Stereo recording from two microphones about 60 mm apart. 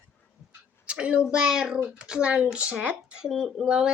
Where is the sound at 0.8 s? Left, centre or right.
Centre.